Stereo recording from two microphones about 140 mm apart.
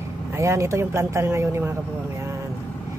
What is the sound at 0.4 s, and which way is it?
Speech, 20° right (ahead or behind).